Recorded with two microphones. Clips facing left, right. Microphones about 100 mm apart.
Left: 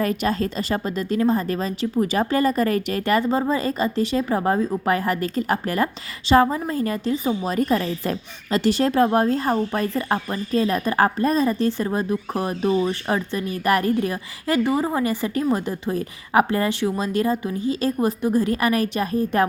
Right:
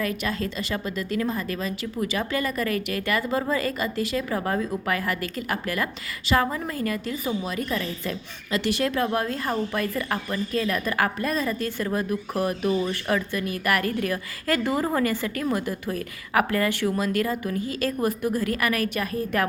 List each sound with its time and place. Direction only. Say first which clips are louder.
0.0 s a woman's voice: left 5 dB; 35° left (ahead or behind)